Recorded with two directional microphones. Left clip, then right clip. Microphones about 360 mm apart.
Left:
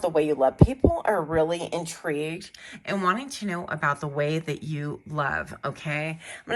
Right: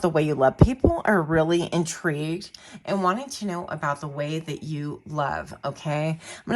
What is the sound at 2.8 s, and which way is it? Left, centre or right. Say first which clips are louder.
Speech: right 1 dB; centre.